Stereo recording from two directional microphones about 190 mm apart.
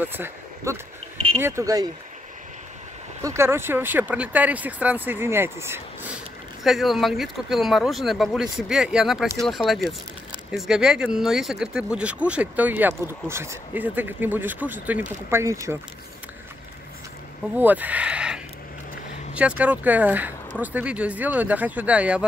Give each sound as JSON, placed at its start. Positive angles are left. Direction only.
{"t": 0.0, "sound": "speech", "side_deg": -10}
{"t": 1.1, "sound": "a sound", "side_deg": -30}
{"t": 1.4, "sound": "speech", "side_deg": -15}
{"t": 3.2, "sound": "speech", "side_deg": -15}
{"t": 6.6, "sound": "speech", "side_deg": 0}
{"t": 17.6, "sound": "speech", "side_deg": -10}